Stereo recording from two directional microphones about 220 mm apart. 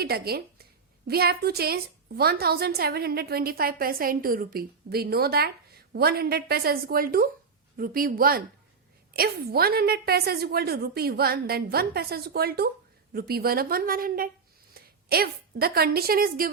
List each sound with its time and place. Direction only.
0.0 s a woman's voice: 45° right (ahead or behind)